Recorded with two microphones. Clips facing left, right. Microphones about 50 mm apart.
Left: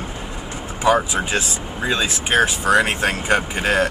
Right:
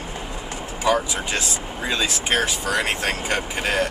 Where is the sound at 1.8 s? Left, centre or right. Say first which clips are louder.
Left 3 dB; left.